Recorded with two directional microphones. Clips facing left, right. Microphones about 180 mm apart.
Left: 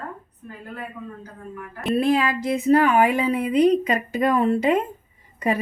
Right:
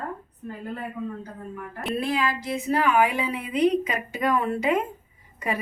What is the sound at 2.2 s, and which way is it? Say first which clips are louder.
Speech: left 4 dB; 50° left (ahead or behind).